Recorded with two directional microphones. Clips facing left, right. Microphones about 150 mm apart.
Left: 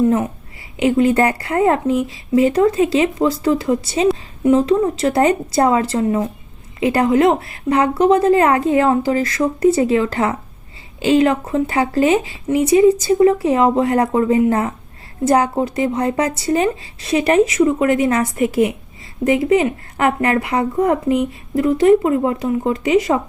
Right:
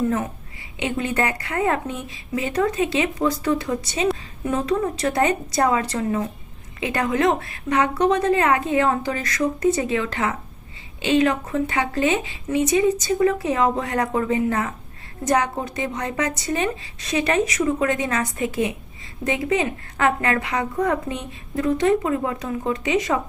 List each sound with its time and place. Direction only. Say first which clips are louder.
0.8 s a woman's voice: left 9 dB; 30° left (ahead or behind)